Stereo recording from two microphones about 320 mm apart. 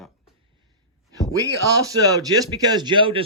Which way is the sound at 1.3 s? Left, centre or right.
Centre.